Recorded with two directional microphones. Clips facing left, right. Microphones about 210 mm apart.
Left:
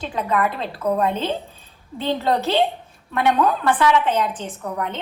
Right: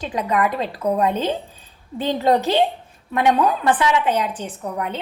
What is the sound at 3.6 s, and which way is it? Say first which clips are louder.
A woman's voice: even; 15° right (ahead or behind).